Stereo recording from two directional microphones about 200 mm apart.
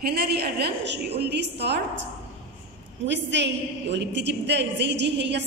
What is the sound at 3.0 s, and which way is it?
A woman's voice, 60° right (ahead or behind).